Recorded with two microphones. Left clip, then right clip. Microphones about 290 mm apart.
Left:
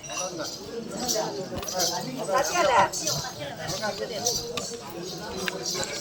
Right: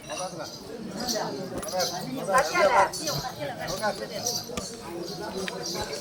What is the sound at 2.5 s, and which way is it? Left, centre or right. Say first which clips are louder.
Speech: left 1 dB; left.